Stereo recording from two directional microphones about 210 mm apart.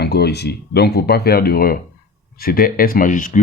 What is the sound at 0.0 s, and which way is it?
Speech, 50° left (ahead or behind).